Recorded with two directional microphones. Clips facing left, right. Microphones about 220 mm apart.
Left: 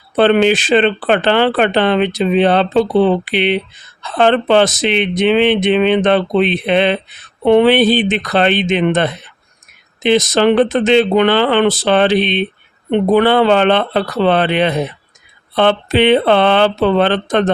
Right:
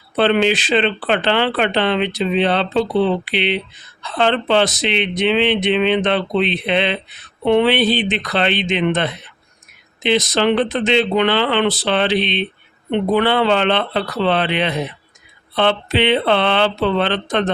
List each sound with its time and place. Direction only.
0.2 s speech: 50° left (ahead or behind)